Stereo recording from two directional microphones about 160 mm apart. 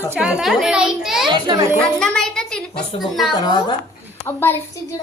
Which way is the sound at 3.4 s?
30° left (ahead or behind).